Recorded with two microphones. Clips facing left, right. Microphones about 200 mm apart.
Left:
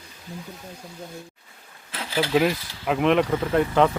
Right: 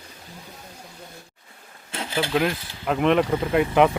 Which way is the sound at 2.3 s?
5° left (ahead or behind).